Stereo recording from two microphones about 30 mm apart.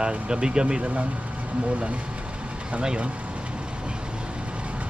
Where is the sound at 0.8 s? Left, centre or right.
Right.